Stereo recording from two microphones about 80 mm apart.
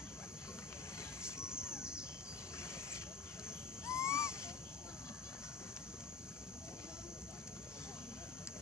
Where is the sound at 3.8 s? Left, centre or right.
Left.